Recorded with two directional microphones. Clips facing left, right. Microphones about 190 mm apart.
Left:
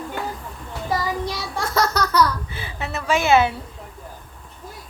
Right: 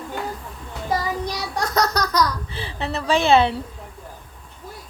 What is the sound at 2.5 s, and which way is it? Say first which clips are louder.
A woman's voice: right 2 dB; 30° right (ahead or behind).